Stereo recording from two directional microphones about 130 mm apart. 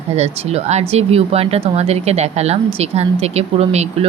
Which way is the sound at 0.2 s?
55° right (ahead or behind).